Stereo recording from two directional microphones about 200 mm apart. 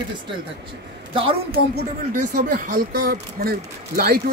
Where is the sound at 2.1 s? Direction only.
40° right (ahead or behind).